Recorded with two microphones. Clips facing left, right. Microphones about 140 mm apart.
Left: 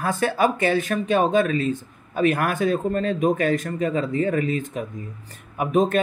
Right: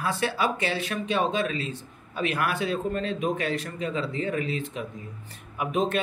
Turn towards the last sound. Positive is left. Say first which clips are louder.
# left 6 dB
turn(degrees=45)  # may be behind; listen again after turning